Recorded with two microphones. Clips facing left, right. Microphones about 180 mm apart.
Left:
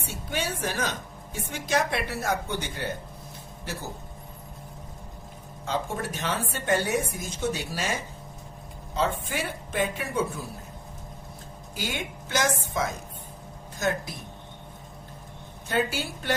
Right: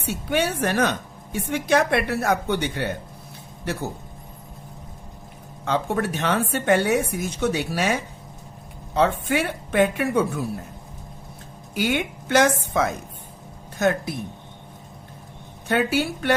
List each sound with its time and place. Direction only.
0.0 s a woman's voice: 65° right (ahead or behind)
5.6 s a woman's voice: 65° right (ahead or behind)
11.7 s a woman's voice: 65° right (ahead or behind)
15.7 s a woman's voice: 65° right (ahead or behind)